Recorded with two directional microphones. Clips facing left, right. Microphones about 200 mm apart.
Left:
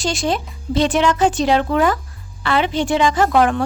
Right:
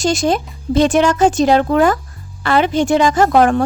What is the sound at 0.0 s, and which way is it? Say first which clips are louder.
A woman's voice: right 5 dB; 45° right (ahead or behind).